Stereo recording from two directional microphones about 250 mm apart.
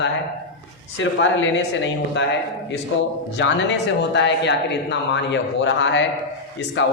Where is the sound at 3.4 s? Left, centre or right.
Left.